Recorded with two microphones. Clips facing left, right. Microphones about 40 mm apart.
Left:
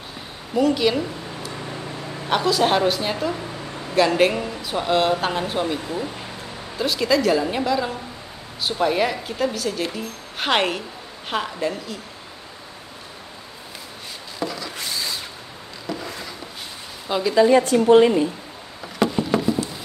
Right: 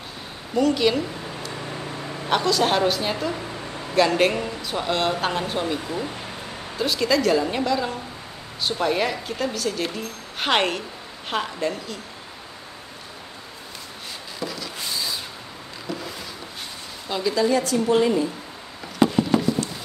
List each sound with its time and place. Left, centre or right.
0.6 s a woman's voice: centre
6.8 s a woman's voice: centre
14.4 s wood: centre
17.1 s speech: centre
17.4 s a woman's voice: left
19.3 s a sound: centre